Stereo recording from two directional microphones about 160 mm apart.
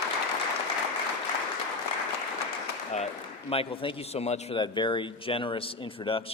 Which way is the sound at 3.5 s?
35° left (ahead or behind).